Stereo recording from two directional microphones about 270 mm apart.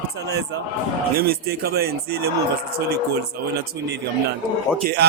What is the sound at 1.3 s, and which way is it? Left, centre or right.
Speech, right.